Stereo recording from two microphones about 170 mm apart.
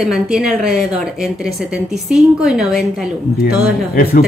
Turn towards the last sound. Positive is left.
turn(degrees=60)  # may be behind; listen again after turning